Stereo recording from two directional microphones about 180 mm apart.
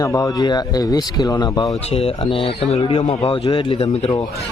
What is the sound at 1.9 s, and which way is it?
Speech, 30° left (ahead or behind).